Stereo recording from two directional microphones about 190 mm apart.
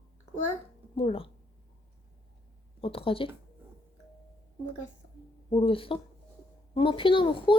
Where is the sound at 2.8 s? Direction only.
30° left (ahead or behind).